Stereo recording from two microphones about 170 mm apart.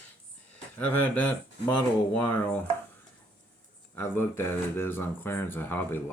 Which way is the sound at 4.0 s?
15° left (ahead or behind).